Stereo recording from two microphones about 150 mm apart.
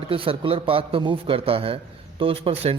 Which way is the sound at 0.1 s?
35° right (ahead or behind).